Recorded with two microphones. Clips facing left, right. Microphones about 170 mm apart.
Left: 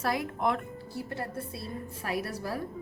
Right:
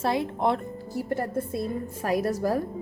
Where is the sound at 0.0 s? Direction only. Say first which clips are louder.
Right 4 dB; 25° right (ahead or behind).